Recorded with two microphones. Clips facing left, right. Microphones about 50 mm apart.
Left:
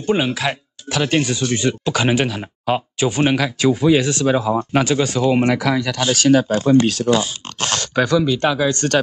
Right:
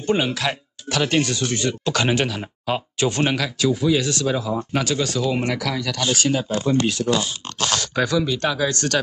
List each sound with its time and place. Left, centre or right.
0.0 s speech: centre
1.9 s speech: centre
3.5 s speech: left
6.2 s speech: left
7.1 s speech: left
7.8 s speech: left